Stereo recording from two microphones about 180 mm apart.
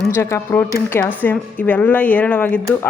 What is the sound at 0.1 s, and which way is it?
A woman's voice, 15° left (ahead or behind).